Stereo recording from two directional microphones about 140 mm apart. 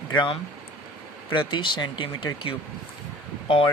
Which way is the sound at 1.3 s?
35° left (ahead or behind).